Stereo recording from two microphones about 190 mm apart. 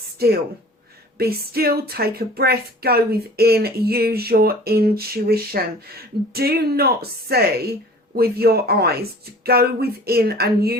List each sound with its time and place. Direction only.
0.2 s speech: 55° right (ahead or behind)